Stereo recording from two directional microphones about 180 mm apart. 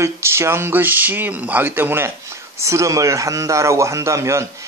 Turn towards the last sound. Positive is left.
turn(degrees=-15)  # may be behind; listen again after turning